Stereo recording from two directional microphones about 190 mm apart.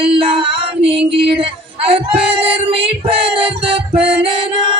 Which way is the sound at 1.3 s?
30° right (ahead or behind).